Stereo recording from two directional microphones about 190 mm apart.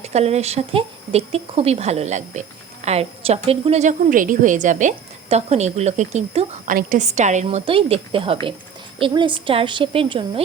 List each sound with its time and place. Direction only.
0.0 s a woman's voice: 35° right (ahead or behind)